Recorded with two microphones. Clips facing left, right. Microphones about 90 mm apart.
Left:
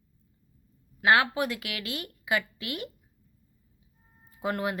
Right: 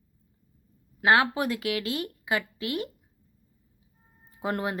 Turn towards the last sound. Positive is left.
turn(degrees=-30)  # may be behind; listen again after turning